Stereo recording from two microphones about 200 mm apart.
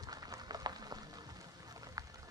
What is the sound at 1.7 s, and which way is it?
Run, 20° right (ahead or behind).